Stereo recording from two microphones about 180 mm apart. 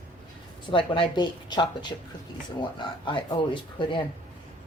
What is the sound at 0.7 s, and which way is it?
Speech, 30° left (ahead or behind).